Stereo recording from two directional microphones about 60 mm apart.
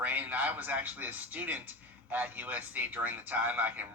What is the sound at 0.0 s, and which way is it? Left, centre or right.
Speech, right.